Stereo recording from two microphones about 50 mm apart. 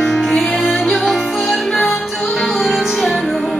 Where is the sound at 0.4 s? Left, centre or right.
Centre.